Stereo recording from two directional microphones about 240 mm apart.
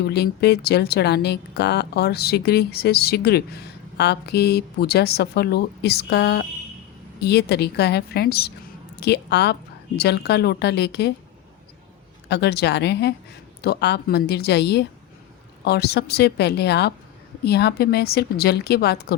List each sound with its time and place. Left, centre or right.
0.0 s a woman's voice: left
12.3 s a woman's voice: left